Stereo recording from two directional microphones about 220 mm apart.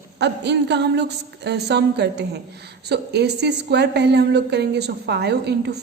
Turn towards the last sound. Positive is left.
turn(degrees=-50)  # may be behind; listen again after turning